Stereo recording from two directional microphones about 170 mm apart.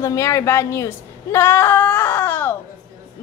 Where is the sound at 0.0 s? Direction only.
15° left (ahead or behind).